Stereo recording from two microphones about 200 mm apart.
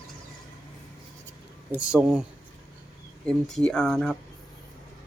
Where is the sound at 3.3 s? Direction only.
Centre (ahead or behind).